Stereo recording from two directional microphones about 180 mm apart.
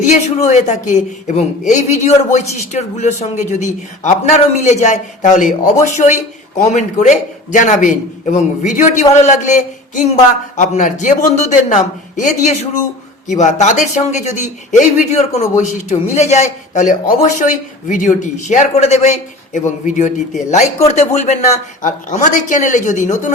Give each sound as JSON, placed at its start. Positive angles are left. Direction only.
{"t": 0.0, "sound": "a man's voice", "side_deg": 40}